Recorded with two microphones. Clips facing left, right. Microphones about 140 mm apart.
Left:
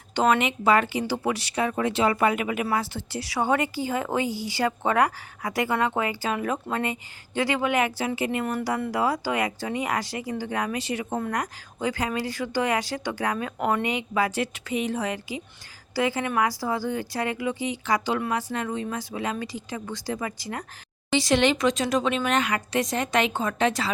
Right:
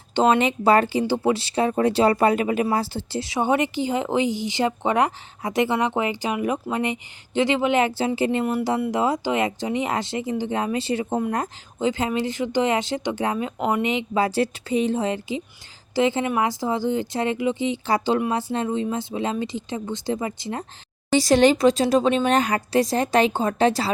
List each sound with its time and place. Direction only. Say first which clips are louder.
0.1 s speech: right 3 dB; 30° right (ahead or behind)
21.1 s speech: right 5 dB; 40° right (ahead or behind)